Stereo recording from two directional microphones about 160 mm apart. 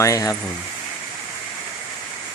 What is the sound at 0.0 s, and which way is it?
Speech, 20° left (ahead or behind).